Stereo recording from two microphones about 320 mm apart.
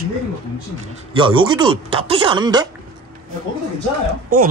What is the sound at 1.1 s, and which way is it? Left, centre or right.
Speech, centre.